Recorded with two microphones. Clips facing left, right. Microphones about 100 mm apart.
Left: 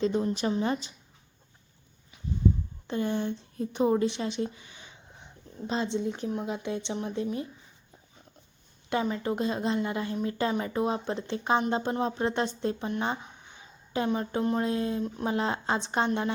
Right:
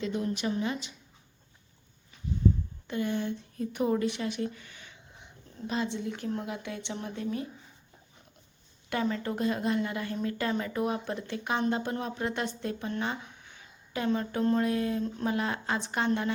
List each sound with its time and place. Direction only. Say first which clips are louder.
0.0 s a woman's voice: left 4 dB; 30° left (ahead or behind)
2.8 s speech: left 2 dB; 30° left (ahead or behind)
8.9 s speech: left 2 dB; 20° left (ahead or behind)